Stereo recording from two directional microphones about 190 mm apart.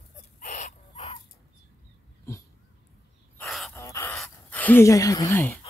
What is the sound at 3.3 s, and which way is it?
Dog, centre (ahead or behind).